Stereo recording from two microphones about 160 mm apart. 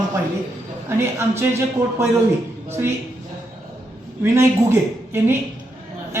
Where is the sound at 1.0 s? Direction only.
15° right (ahead or behind).